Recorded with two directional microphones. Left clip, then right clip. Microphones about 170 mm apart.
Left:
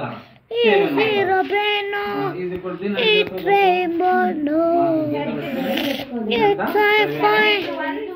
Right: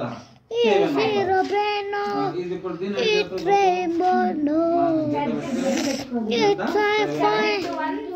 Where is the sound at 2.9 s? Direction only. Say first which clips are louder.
Left 4 dB; 10° right (ahead or behind).